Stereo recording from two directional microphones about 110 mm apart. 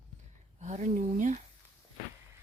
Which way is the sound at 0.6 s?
90° right.